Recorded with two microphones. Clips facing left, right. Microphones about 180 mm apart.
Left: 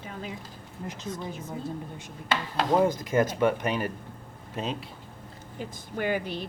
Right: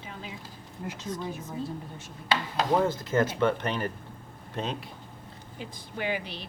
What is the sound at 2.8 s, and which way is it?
Speech, 15° left (ahead or behind).